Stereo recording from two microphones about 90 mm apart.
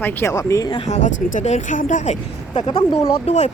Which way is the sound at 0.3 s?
35° left (ahead or behind).